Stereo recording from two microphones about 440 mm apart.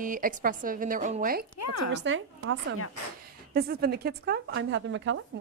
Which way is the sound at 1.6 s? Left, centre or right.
Left.